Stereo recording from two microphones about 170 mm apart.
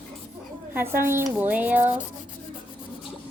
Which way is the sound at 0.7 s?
10° right (ahead or behind).